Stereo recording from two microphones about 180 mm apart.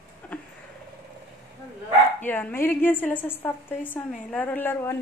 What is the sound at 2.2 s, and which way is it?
A woman's voice, 10° left (ahead or behind).